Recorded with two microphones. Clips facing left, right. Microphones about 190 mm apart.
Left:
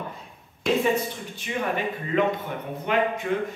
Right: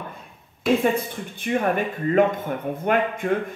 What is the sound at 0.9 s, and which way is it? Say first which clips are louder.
Speech: even; 50° right (ahead or behind).